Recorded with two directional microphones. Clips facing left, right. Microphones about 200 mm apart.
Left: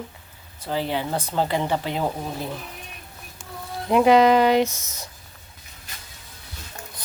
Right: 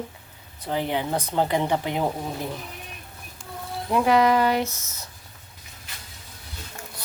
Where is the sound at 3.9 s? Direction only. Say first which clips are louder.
Left 4 dB; 20° left (ahead or behind).